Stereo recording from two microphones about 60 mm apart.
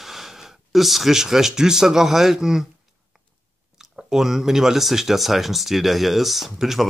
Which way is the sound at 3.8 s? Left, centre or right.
Centre.